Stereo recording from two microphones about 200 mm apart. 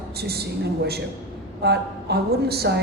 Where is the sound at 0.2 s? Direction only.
55° right (ahead or behind).